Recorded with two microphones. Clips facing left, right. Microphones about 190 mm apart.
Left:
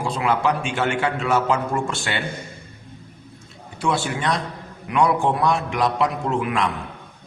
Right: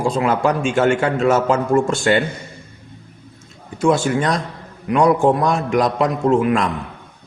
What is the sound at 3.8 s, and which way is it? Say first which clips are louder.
Speech: right 7 dB; 45° right (ahead or behind).